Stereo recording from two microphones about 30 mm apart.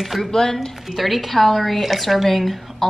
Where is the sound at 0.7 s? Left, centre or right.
Centre.